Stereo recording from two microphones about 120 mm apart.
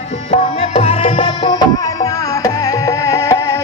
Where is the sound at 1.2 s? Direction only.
35° left (ahead or behind).